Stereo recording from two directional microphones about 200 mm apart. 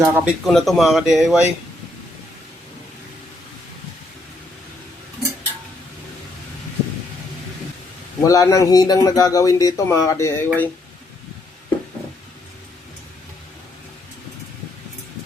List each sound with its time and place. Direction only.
0.0 s speech: centre (ahead or behind)
8.2 s speech: 15° left (ahead or behind)